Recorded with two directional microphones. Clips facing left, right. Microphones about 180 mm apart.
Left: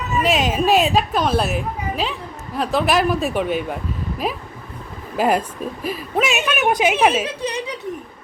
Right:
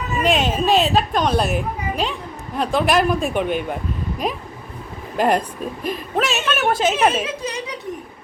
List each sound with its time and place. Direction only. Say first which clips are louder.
0.2 s a child's voice: even; 5° left (ahead or behind)
7.3 s speech: left 2 dB; 30° left (ahead or behind)